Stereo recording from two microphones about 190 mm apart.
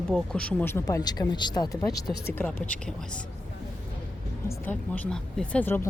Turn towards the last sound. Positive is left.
turn(degrees=10)  # may be behind; listen again after turning